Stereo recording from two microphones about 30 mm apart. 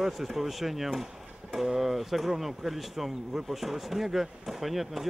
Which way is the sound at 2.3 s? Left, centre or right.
Centre.